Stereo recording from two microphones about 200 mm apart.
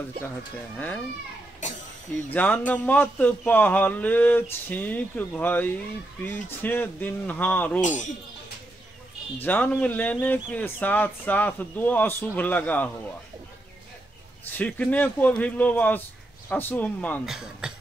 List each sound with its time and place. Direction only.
0.7 s speech: 5° left (ahead or behind)
1.6 s cough: 40° left (ahead or behind)
2.3 s speech: 10° left (ahead or behind)
7.8 s a man's voice: 40° left (ahead or behind)
9.4 s speech: 10° left (ahead or behind)
14.6 s speech: 10° left (ahead or behind)
17.4 s speech: 5° right (ahead or behind)